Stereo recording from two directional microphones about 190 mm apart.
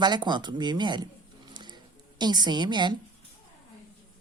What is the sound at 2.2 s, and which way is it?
Speech, 20° right (ahead or behind).